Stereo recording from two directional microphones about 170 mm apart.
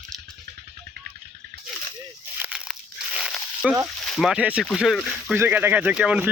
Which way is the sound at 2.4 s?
5° right (ahead or behind).